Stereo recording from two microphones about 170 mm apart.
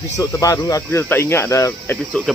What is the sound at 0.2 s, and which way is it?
Speech, 20° left (ahead or behind).